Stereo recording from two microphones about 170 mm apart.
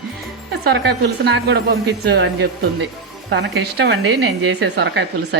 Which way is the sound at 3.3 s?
85° right.